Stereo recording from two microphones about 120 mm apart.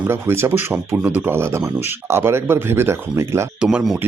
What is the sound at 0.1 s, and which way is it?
Speech, 20° right (ahead or behind).